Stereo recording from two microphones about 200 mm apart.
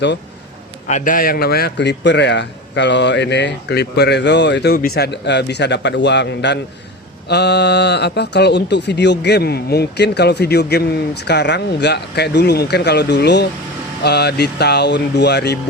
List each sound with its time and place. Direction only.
0.9 s speech: 40° left (ahead or behind); by 15.5 s 55° left (ahead or behind)